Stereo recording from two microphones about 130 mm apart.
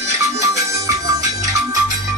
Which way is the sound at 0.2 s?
25° right (ahead or behind).